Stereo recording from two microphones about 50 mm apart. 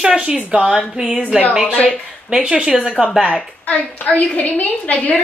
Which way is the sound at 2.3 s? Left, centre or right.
Centre.